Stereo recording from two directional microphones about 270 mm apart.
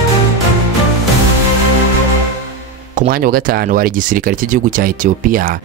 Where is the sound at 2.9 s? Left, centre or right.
Right.